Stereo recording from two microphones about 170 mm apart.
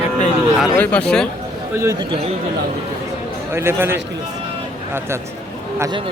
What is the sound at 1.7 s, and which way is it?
Speech, 20° right (ahead or behind).